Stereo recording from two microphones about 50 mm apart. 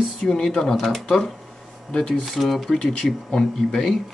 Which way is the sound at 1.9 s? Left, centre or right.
Centre.